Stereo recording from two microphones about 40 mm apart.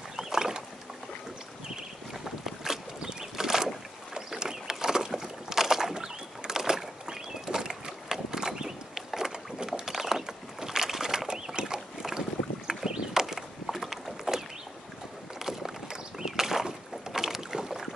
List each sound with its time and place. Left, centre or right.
0.1 s rowboat: centre
2.4 s boat: centre
12.6 s a sound: centre
15.3 s boat: centre